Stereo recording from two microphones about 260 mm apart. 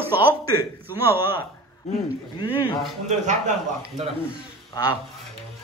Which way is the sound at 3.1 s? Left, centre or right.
Right.